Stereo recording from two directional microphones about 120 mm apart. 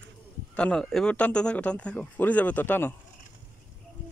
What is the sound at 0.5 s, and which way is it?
Speech, 5° left (ahead or behind).